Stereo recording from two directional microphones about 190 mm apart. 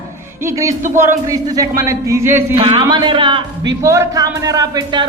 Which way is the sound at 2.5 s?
30° right (ahead or behind).